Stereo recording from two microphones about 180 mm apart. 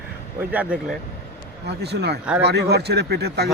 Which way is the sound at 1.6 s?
65° right (ahead or behind).